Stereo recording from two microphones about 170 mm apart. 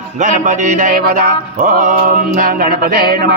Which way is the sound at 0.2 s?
45° right (ahead or behind).